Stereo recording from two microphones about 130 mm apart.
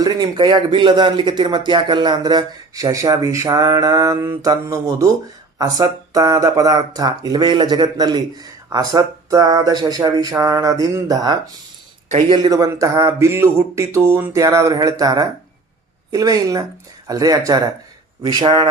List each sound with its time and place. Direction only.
0.0 s speech: 35° right (ahead or behind)